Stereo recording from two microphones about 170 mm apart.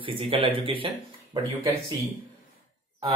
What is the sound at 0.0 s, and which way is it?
Speech, 30° right (ahead or behind).